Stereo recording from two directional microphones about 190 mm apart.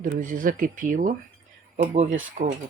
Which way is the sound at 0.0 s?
45° right (ahead or behind).